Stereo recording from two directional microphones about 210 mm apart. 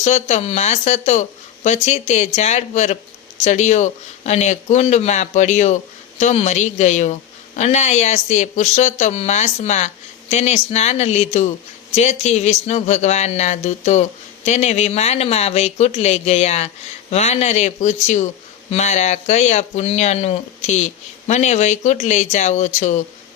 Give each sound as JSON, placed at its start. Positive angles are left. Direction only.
{"t": 0.0, "sound": "a woman's voice", "side_deg": 35}